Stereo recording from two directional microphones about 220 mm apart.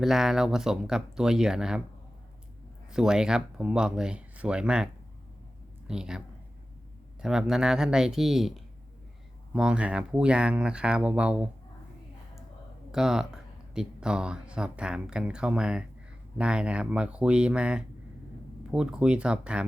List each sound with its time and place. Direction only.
0.0 s speech: centre (ahead or behind)
2.9 s speech: 5° right (ahead or behind)
5.9 s speech: 5° right (ahead or behind)
12.9 s speech: centre (ahead or behind)